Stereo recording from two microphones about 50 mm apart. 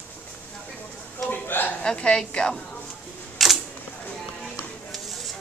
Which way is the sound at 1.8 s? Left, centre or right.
Centre.